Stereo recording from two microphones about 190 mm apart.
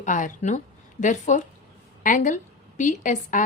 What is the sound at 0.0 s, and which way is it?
A woman's voice, 45° left (ahead or behind).